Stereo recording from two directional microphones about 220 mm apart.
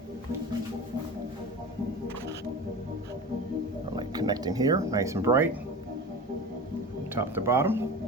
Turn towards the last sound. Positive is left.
turn(degrees=-10)  # may be behind; listen again after turning